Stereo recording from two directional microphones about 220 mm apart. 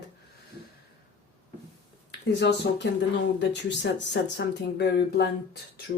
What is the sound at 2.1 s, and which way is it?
Speech, 50° left (ahead or behind).